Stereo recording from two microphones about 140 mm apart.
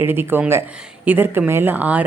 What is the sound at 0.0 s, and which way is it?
A woman's voice, 15° right (ahead or behind).